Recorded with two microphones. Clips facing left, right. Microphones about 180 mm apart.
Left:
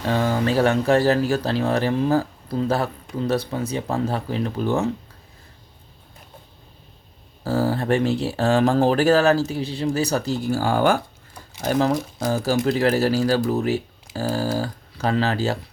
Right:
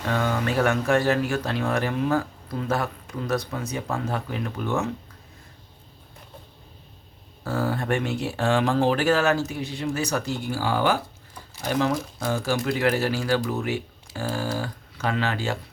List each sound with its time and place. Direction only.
0.0 s speech: 30° left (ahead or behind)
7.4 s speech: 30° left (ahead or behind)